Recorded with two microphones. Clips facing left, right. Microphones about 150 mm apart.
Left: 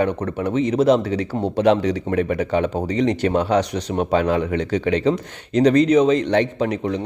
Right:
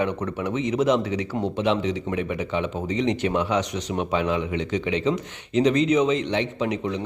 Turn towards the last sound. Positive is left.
turn(degrees=35)  # may be behind; listen again after turning